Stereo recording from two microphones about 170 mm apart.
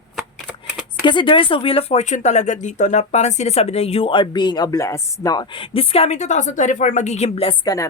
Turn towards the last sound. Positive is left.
turn(degrees=35)  # may be behind; listen again after turning